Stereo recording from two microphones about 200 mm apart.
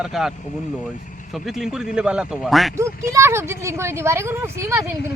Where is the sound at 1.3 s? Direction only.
Centre (ahead or behind).